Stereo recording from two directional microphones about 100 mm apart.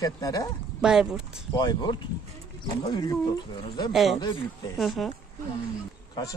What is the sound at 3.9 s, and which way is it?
Speech, centre (ahead or behind).